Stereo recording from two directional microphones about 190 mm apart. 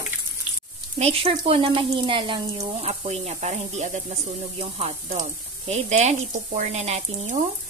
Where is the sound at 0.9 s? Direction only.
30° right (ahead or behind).